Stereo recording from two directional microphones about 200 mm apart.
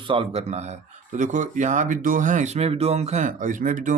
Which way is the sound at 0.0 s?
25° right (ahead or behind).